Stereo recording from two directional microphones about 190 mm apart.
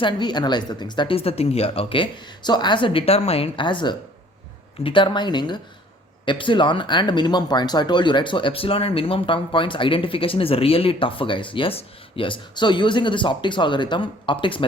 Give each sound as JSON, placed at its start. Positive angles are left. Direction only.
{"t": 0.0, "sound": "speech", "side_deg": 25}